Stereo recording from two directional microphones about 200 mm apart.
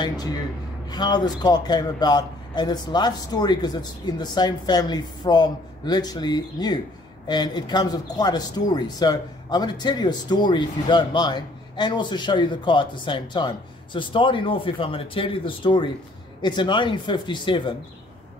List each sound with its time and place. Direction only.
0.8 s speech: 20° left (ahead or behind)